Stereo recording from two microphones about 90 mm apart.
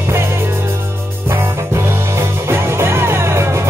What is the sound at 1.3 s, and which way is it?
Music, 30° right (ahead or behind).